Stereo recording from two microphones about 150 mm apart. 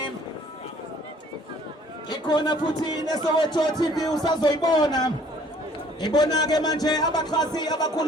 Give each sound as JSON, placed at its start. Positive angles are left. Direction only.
{"t": 2.0, "sound": "a man's voice", "side_deg": 30}